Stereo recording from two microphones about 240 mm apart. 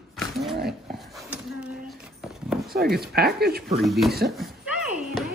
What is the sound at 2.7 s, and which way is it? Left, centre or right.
Speech, right.